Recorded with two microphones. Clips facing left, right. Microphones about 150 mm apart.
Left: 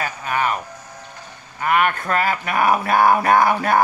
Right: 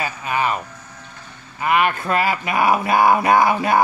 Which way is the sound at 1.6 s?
20° right (ahead or behind).